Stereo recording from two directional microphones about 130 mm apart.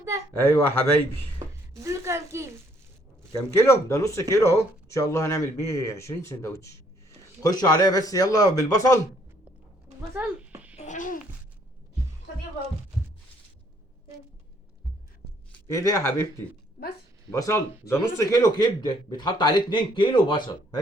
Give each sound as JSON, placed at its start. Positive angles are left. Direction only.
{"t": 0.3, "sound": "speech", "side_deg": 15}
{"t": 1.7, "sound": "a sound", "side_deg": -25}
{"t": 3.5, "sound": "speech", "side_deg": 20}
{"t": 10.0, "sound": "a sound", "side_deg": -15}
{"t": 10.8, "sound": "babbling", "side_deg": 80}
{"t": 15.7, "sound": "speech", "side_deg": 25}
{"t": 17.3, "sound": "a man's voice", "side_deg": 25}